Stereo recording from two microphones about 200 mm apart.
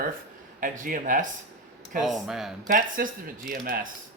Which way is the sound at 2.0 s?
Centre (ahead or behind).